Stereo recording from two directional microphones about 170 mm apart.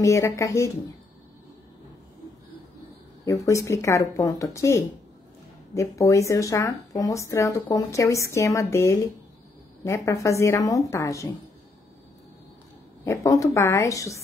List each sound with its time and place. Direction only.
0.0 s speech: 20° left (ahead or behind)
3.3 s speech: 20° left (ahead or behind)
13.0 s a woman's voice: 20° left (ahead or behind)